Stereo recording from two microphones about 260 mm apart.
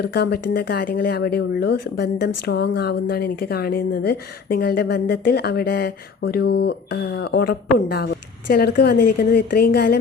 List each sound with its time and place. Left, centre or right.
0.0 s a woman's voice: left